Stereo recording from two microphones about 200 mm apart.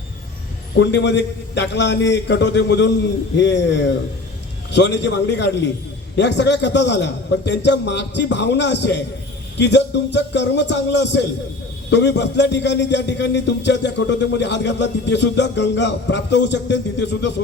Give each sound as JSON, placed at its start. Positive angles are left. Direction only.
{"t": 0.8, "sound": "a man's voice", "side_deg": 60}